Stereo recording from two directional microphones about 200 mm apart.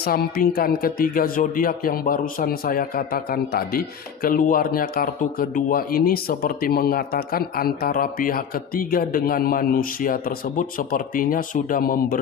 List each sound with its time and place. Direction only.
0.0 s speech: 50° left (ahead or behind)